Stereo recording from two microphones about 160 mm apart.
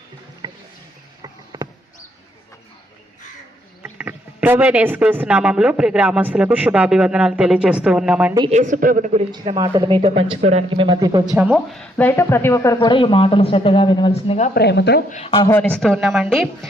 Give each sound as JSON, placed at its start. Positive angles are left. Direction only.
{"t": 0.4, "sound": "a sound", "side_deg": -25}
{"t": 3.8, "sound": "speech", "side_deg": -10}
{"t": 8.4, "sound": "speech", "side_deg": -50}
{"t": 9.6, "sound": "speech", "side_deg": -30}
{"t": 11.3, "sound": "a woman's voice", "side_deg": -5}
{"t": 12.9, "sound": "speech", "side_deg": 30}
{"t": 14.5, "sound": "speech", "side_deg": 90}
{"t": 15.1, "sound": "speech", "side_deg": 35}
{"t": 15.4, "sound": "speech", "side_deg": 10}